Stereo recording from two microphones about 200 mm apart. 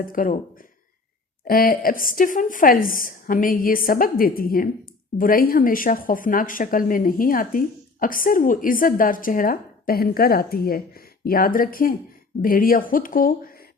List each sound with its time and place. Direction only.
0.1 s speech: 45° left (ahead or behind)
1.5 s speech: 45° left (ahead or behind)